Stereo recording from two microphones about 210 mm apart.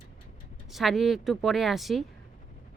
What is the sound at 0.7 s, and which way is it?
A woman's voice, centre (ahead or behind).